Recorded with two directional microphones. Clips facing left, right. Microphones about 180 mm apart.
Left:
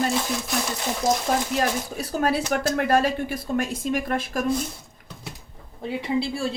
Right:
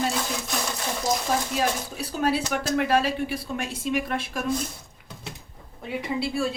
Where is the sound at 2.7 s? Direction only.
50° left (ahead or behind).